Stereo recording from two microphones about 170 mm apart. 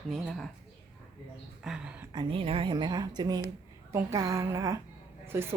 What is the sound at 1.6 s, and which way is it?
Speech, 5° right (ahead or behind).